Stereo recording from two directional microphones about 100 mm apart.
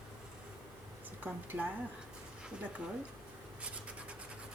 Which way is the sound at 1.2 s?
15° right (ahead or behind).